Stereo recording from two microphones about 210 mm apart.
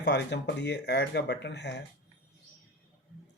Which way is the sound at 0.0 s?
55° left (ahead or behind).